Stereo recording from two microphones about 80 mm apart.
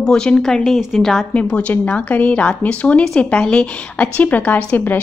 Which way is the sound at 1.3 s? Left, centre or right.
Centre.